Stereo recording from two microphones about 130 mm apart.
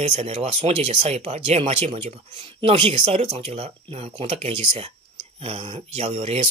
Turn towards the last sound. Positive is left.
turn(degrees=-50)  # may be behind; listen again after turning